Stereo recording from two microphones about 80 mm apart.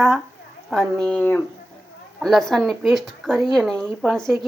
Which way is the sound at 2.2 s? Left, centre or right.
Centre.